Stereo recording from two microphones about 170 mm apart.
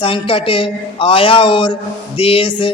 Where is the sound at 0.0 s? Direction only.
30° left (ahead or behind).